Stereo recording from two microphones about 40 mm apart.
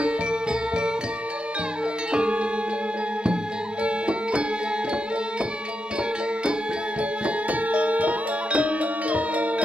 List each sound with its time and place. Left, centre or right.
0.0 s music: right
2.1 s music: right
3.8 s music: right
7.0 s music: right